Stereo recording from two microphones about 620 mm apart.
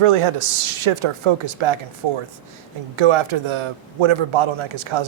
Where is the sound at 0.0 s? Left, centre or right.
Right.